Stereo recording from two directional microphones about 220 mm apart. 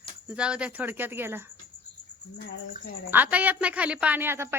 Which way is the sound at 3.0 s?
10° right (ahead or behind).